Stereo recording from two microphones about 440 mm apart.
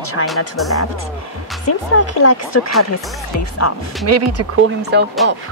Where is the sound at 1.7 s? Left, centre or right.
Left.